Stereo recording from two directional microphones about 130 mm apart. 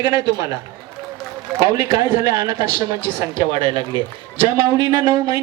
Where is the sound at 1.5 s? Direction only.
25° right (ahead or behind).